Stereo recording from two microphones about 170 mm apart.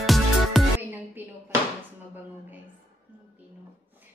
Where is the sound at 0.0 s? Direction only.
Centre (ahead or behind).